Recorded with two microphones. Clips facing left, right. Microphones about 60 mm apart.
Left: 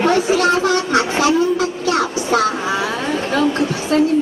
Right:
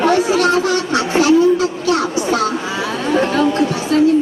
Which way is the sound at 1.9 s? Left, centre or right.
Left.